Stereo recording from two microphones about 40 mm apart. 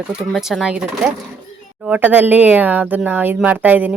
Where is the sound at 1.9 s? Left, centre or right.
Right.